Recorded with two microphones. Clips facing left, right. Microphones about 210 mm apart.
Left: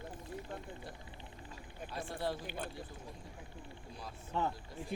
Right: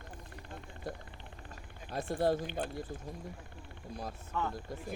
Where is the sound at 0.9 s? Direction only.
45° right (ahead or behind).